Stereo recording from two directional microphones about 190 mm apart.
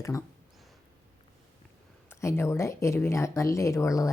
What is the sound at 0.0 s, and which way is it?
Speech, 15° left (ahead or behind).